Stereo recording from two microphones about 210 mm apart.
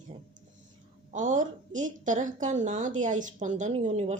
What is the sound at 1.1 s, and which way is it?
Speech, 35° right (ahead or behind).